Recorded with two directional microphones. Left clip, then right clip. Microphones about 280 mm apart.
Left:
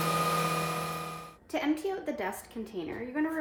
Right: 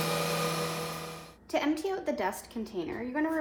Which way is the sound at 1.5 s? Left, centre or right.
Centre.